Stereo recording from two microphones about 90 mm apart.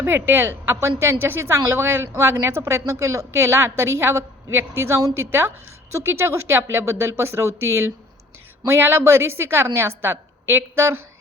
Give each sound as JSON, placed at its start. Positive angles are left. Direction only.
{"t": 0.0, "sound": "a woman's voice", "side_deg": -25}